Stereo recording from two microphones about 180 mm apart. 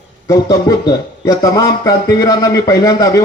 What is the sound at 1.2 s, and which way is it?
Speech, 20° left (ahead or behind).